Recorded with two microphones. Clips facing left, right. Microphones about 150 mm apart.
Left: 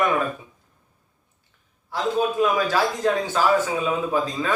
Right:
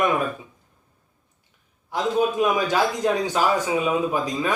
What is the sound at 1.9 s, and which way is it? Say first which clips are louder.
A man's voice: right 1 dB; 20° right (ahead or behind).